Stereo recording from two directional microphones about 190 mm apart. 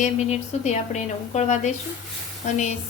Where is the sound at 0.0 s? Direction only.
35° left (ahead or behind).